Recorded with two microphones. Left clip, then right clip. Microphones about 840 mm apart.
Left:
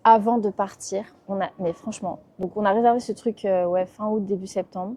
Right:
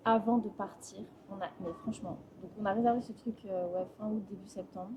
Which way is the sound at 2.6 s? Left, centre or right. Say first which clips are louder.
Left 12 dB; left.